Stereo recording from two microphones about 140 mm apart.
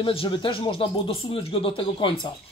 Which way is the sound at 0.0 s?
40° left (ahead or behind).